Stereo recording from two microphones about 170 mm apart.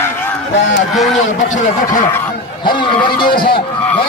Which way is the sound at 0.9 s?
Centre (ahead or behind).